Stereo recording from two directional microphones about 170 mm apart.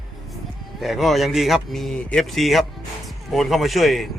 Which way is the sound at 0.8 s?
Centre (ahead or behind).